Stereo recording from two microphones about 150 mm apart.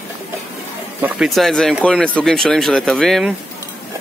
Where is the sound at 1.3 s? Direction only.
Centre (ahead or behind).